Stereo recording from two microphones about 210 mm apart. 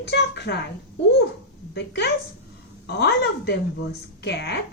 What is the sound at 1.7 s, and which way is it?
A woman's voice, 50° left (ahead or behind).